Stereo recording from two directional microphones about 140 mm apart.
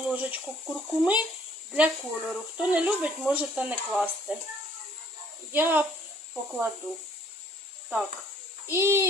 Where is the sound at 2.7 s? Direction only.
10° right (ahead or behind).